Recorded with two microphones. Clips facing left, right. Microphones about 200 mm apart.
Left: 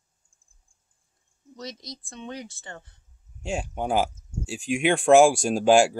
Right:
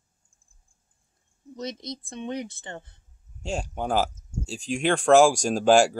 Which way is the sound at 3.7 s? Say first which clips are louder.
Left 1 dB; 5° left (ahead or behind).